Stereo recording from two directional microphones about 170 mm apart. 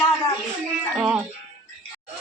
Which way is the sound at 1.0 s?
5° right (ahead or behind).